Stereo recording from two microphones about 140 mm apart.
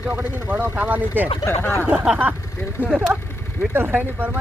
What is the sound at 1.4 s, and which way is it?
Speech, 20° left (ahead or behind).